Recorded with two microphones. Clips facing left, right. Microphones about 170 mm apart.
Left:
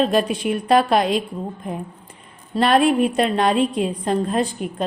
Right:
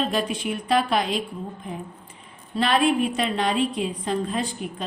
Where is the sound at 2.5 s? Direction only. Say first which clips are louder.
Left 5 dB; 45° left (ahead or behind).